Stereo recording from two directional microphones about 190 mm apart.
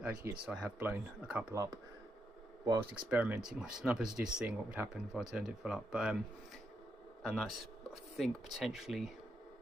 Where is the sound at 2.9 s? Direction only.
5° right (ahead or behind).